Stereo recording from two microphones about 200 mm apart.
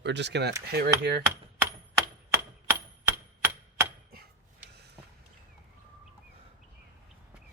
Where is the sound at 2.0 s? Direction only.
10° right (ahead or behind).